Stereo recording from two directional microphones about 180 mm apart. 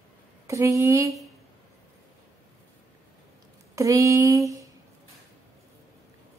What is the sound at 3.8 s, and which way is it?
Speech, 15° right (ahead or behind).